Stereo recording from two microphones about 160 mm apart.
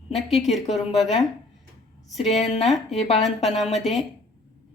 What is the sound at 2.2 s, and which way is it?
A woman's voice, 45° left (ahead or behind).